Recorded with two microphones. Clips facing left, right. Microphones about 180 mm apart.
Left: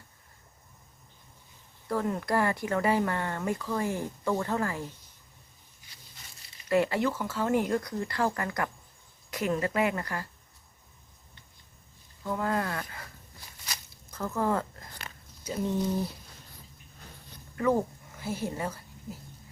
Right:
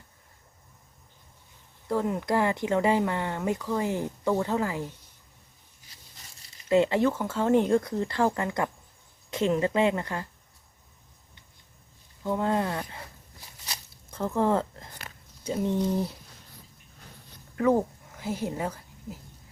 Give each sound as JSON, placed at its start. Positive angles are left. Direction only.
{"t": 1.9, "sound": "speech", "side_deg": -15}
{"t": 6.7, "sound": "speech", "side_deg": -20}
{"t": 12.2, "sound": "speech", "side_deg": -25}
{"t": 13.7, "sound": "a sound", "side_deg": -30}
{"t": 15.4, "sound": "speech", "side_deg": -25}
{"t": 17.6, "sound": "a woman's voice", "side_deg": -15}